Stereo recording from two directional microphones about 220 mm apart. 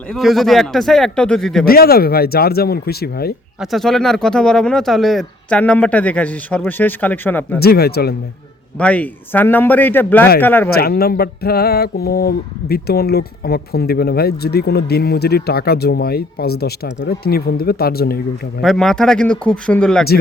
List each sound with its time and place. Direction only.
0.1 s speech: centre (ahead or behind)
1.6 s speech: 45° left (ahead or behind)
3.6 s speech: centre (ahead or behind)
7.6 s speech: 45° left (ahead or behind)
8.8 s a man's voice: 5° left (ahead or behind)
10.8 s speech: 45° left (ahead or behind)
18.6 s speech: centre (ahead or behind)